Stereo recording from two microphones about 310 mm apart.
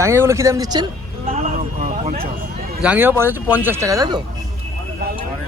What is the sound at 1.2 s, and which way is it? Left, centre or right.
Vehicle, centre.